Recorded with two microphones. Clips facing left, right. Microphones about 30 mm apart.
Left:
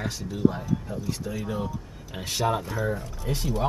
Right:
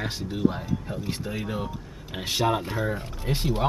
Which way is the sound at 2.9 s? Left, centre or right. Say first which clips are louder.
Even; right.